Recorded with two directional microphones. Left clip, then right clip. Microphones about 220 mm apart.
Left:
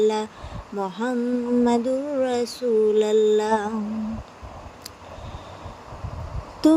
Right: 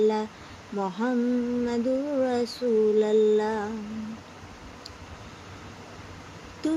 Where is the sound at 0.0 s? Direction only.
30° left (ahead or behind).